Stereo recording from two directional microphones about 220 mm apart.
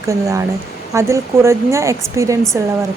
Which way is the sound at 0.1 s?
15° right (ahead or behind).